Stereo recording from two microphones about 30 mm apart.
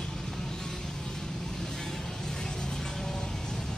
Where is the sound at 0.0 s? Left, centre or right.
Centre.